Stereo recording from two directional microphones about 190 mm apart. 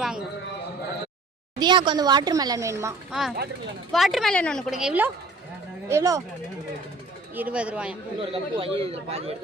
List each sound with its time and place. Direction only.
0.0 s a sound: 5° right (ahead or behind)
1.5 s a woman's voice: 25° right (ahead or behind)
3.1 s a woman's voice: centre (ahead or behind)
7.3 s a woman's voice: 5° right (ahead or behind)
8.2 s a man's voice: 30° right (ahead or behind)